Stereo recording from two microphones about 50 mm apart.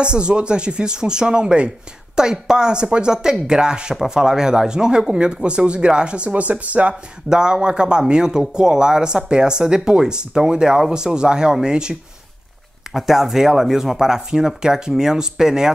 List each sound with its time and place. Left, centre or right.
0.0 s speech: centre
7.2 s speech: centre